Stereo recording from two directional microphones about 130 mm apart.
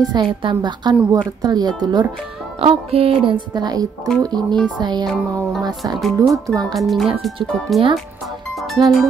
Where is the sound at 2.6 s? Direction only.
45° right (ahead or behind); by 4.5 s 30° right (ahead or behind).